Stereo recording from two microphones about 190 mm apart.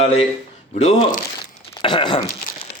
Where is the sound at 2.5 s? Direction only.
45° left (ahead or behind).